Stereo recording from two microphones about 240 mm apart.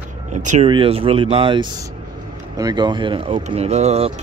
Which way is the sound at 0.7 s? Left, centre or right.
Right.